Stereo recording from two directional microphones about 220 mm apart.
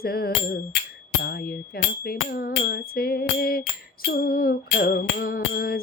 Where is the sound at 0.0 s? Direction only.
45° left (ahead or behind).